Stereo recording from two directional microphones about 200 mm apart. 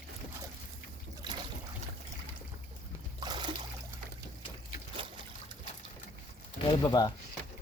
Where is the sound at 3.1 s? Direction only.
20° right (ahead or behind).